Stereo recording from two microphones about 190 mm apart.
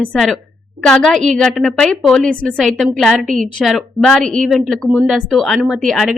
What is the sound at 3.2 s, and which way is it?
Speech, 45° right (ahead or behind).